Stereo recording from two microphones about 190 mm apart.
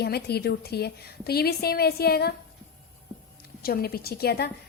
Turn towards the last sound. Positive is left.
turn(degrees=55)  # may be behind; listen again after turning